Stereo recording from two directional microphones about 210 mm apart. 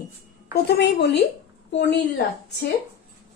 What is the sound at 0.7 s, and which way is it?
Speech, 50° left (ahead or behind).